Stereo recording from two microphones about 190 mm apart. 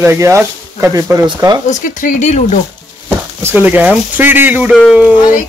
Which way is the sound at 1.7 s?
40° left (ahead or behind).